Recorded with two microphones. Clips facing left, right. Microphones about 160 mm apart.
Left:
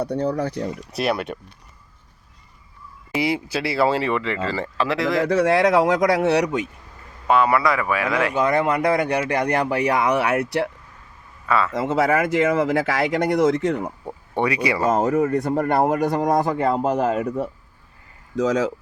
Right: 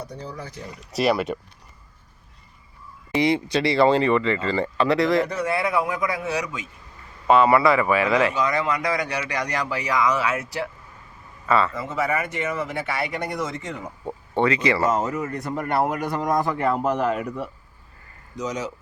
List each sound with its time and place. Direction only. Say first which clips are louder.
0.0 s speech: left 12 dB; 70° left (ahead or behind)
0.9 s speech: right 3 dB; centre (ahead or behind)
3.1 s speech: right 2 dB; 5° left (ahead or behind)
5.2 s speech: left 7 dB; 90° left; by 6.7 s 65° left (ahead or behind)
7.3 s speech: right 2 dB; centre (ahead or behind)
8.3 s speech: left 4 dB; 55° left (ahead or behind)
11.4 s speech: right 1 dB; centre (ahead or behind)
11.7 s speech: left 6 dB; 90° left; by 13.9 s 60° left (ahead or behind)
14.3 s speech: right 1 dB; 15° left (ahead or behind)
14.8 s speech: left 5 dB; 55° left (ahead or behind)
15.6 s speech: left 1 dB; 40° left (ahead or behind)